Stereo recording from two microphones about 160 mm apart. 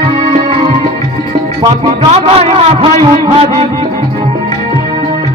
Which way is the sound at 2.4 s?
40° right (ahead or behind).